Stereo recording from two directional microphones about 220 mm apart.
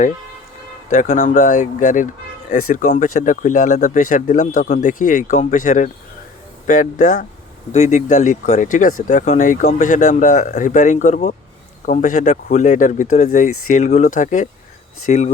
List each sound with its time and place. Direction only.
0.9 s speech: 35° left (ahead or behind)